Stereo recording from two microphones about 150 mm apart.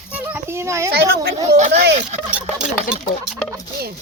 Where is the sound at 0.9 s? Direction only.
90° right.